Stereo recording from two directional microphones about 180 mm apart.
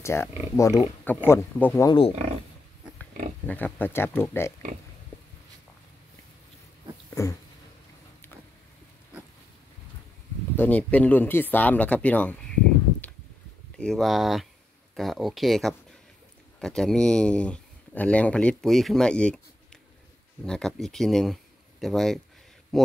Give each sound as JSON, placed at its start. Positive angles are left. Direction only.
{"t": 0.0, "sound": "speech", "side_deg": 15}
{"t": 1.9, "sound": "speech", "side_deg": 30}
{"t": 3.0, "sound": "speech", "side_deg": 10}
{"t": 7.1, "sound": "dog", "side_deg": 15}
{"t": 10.5, "sound": "speech", "side_deg": 10}
{"t": 13.7, "sound": "speech", "side_deg": 5}